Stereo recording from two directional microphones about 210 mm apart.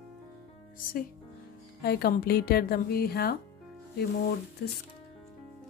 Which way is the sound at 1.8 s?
50° left (ahead or behind).